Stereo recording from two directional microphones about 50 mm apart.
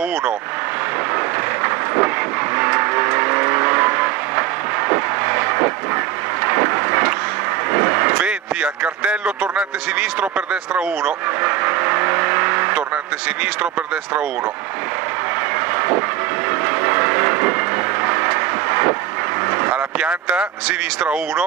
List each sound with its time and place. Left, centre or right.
1.1 s train: right
7.7 s vehicle: right
8.6 s speech: right
11.1 s vehicle: right
15.5 s vehicle: right